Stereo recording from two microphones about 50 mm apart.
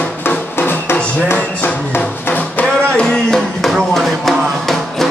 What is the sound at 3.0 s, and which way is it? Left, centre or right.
Music, centre.